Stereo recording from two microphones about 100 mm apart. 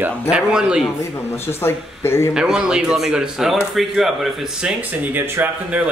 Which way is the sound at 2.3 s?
5° right (ahead or behind).